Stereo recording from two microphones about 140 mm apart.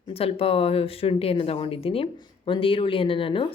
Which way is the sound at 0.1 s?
45° left (ahead or behind).